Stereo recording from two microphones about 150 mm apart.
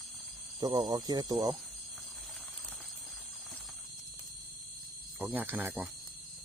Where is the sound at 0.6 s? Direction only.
25° right (ahead or behind).